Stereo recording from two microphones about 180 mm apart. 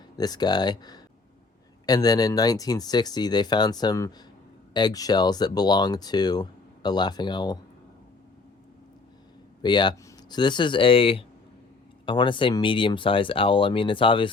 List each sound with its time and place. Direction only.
0.2 s speech: 20° left (ahead or behind)
9.6 s speech: 25° left (ahead or behind)